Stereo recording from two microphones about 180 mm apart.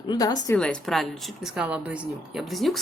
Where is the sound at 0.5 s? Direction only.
5° left (ahead or behind).